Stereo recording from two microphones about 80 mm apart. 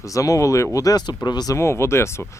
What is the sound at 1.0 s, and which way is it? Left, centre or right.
Speech, left.